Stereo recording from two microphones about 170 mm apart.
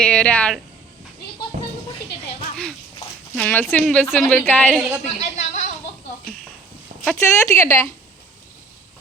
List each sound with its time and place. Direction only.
0.0 s a woman's voice: 5° left (ahead or behind)
3.3 s a woman's voice: 10° left (ahead or behind)
4.7 s a woman's voice: 5° right (ahead or behind)
5.2 s a sound: 45° left (ahead or behind)
7.0 s a woman's voice: 15° left (ahead or behind)